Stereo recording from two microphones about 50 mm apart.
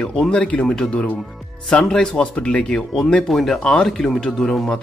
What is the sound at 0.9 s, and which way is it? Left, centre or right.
Speech, left.